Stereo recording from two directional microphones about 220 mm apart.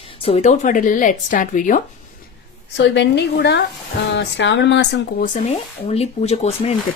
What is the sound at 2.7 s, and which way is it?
Speech, 55° left (ahead or behind).